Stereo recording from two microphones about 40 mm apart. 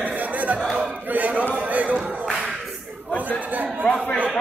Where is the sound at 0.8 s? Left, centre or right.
Right.